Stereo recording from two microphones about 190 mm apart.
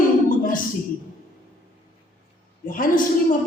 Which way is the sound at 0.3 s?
45° left (ahead or behind).